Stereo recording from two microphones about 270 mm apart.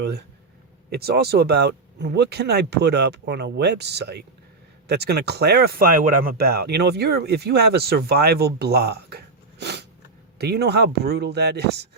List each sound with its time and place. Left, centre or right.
0.9 s speech: right